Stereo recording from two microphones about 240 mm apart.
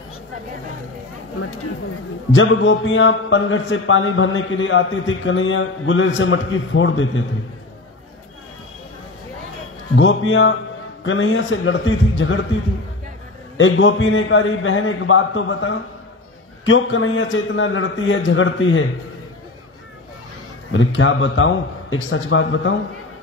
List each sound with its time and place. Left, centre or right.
2.3 s a man's voice: left
9.9 s a man's voice: left
13.6 s a man's voice: left
20.7 s a man's voice: left